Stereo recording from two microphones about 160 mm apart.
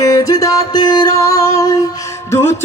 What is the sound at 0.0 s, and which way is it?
Music, 20° left (ahead or behind).